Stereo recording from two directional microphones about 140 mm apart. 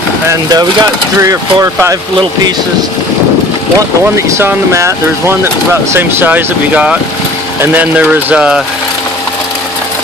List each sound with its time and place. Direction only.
0.3 s speech: 25° right (ahead or behind)
4.4 s speech: 20° right (ahead or behind)